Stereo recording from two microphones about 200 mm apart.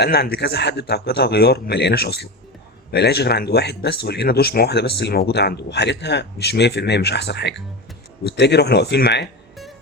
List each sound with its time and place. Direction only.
0.0 s a man's voice: 55° left (ahead or behind)